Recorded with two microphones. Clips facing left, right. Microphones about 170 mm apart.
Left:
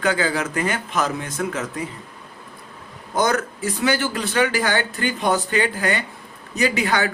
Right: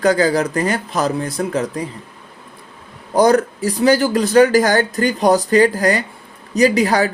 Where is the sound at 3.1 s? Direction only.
35° right (ahead or behind).